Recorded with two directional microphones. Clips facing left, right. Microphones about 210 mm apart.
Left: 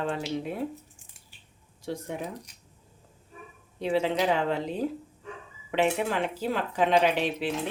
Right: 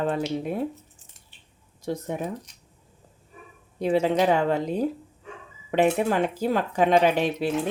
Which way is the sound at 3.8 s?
45° right (ahead or behind).